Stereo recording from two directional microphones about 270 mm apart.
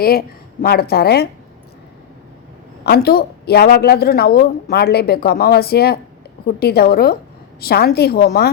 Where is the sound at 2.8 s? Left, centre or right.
Left.